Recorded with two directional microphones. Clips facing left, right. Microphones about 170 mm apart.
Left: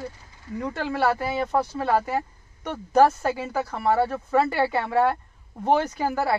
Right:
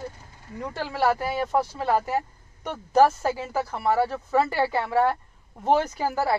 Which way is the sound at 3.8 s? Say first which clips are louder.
Left 1 dB; 5° right (ahead or behind).